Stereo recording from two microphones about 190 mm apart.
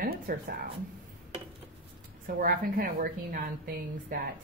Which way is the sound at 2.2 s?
50° right (ahead or behind).